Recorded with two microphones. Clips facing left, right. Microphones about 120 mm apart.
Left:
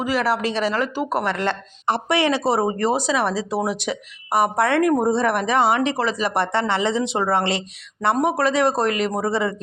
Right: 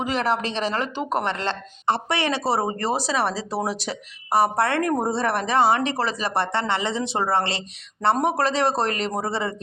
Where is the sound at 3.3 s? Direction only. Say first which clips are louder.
Left 4 dB; 15° left (ahead or behind).